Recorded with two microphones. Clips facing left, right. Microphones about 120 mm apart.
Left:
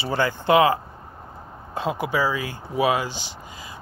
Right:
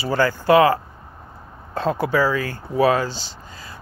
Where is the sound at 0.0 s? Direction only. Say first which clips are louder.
Right 3 dB; 20° left (ahead or behind).